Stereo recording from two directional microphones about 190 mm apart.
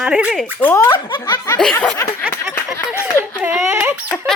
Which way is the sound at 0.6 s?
15° left (ahead or behind).